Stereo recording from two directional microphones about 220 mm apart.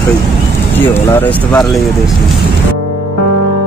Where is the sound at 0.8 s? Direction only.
10° left (ahead or behind).